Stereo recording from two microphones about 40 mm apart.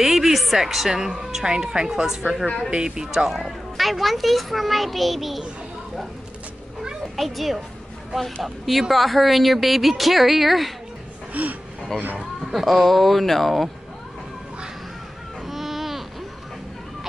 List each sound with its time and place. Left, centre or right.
0.0 s a woman's voice: centre
3.3 s speech: centre
7.2 s speech: centre
11.4 s speech: right
12.2 s speech: centre
15.4 s a sound: centre